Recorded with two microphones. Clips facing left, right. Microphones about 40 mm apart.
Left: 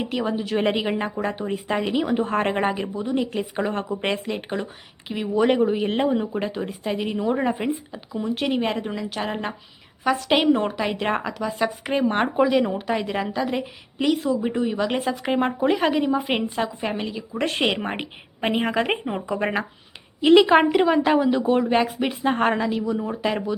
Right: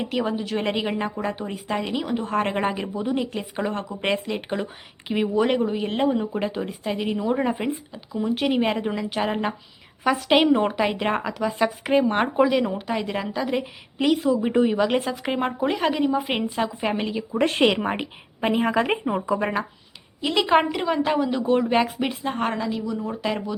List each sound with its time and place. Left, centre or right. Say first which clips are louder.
0.0 s a woman's voice: even; centre
2.1 s a woman's voice: left 2 dB; centre
2.4 s speech: left 1 dB; centre
14.5 s speech: right 4 dB; centre
14.8 s speech: right 1 dB; centre
17.6 s speech: right 3 dB; centre
17.9 s a woman's voice: right 1 dB; centre
20.4 s a woman's voice: left 4 dB; centre
22.2 s a woman's voice: left 8 dB; centre
23.0 s a woman's voice: left 2 dB; centre